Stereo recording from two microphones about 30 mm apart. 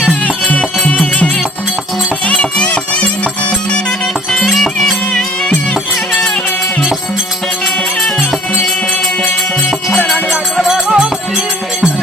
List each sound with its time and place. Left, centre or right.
0.4 s music: left
4.3 s music: centre
10.7 s music: centre